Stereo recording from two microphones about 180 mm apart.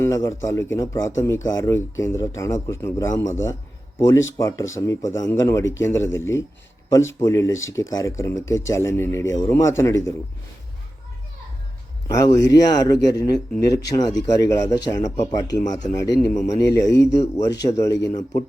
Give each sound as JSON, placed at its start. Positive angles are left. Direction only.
{"t": 0.0, "sound": "speech", "side_deg": 15}
{"t": 4.4, "sound": "a man's voice", "side_deg": 20}
{"t": 12.0, "sound": "a man's voice", "side_deg": 20}